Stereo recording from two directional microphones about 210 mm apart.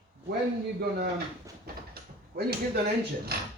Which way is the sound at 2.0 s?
45° right (ahead or behind).